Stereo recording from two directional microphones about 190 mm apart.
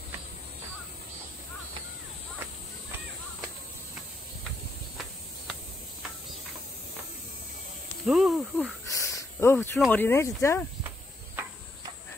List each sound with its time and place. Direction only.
8.0 s cricket: centre (ahead or behind)
8.9 s snake: 15° left (ahead or behind)
9.8 s speech: 10° left (ahead or behind)